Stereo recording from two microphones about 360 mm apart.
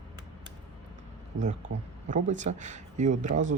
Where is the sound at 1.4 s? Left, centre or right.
Right.